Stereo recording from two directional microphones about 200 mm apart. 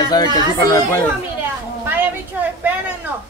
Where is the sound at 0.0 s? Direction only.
20° left (ahead or behind).